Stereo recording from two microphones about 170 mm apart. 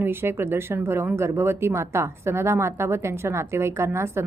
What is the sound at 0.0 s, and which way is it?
Speech, 15° right (ahead or behind).